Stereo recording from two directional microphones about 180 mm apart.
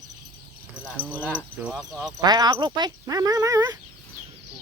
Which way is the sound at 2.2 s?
20° right (ahead or behind).